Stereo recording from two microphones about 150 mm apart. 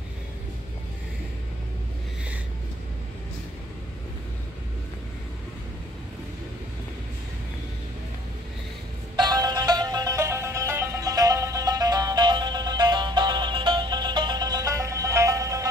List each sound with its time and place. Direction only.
9.1 s music: 30° right (ahead or behind)